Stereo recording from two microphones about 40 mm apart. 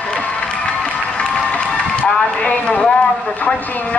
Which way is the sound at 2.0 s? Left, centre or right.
Left.